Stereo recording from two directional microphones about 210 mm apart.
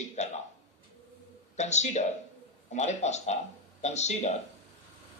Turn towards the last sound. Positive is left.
turn(degrees=30)  # may be behind; listen again after turning